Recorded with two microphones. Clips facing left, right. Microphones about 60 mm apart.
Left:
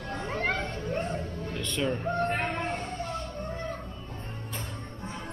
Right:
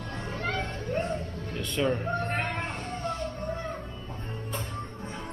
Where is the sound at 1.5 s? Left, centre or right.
Centre.